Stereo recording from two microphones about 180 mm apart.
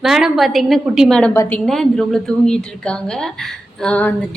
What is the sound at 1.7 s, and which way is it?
Speech, centre (ahead or behind).